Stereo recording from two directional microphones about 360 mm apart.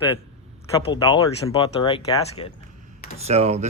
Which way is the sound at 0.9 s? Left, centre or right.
Centre.